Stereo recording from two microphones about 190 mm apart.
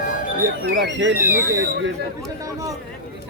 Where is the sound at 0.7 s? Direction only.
70° right (ahead or behind).